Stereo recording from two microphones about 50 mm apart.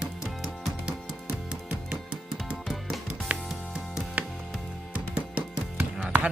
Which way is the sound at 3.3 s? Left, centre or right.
Right.